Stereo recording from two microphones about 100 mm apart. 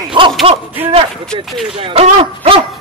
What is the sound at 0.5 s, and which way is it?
Speech, 85° right.